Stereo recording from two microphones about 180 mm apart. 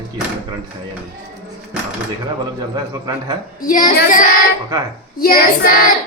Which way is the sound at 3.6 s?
50° left (ahead or behind).